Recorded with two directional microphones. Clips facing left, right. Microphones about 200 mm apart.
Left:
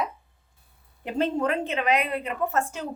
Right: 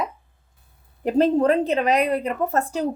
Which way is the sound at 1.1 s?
40° right (ahead or behind).